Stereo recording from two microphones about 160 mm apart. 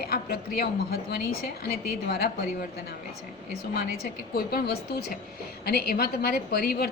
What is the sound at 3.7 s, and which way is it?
A woman's voice, 70° left (ahead or behind).